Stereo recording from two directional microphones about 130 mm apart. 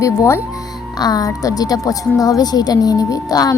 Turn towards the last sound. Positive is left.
turn(degrees=25)  # may be behind; listen again after turning